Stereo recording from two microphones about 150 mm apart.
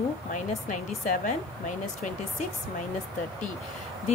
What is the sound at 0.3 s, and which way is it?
A woman's voice, 60° left (ahead or behind).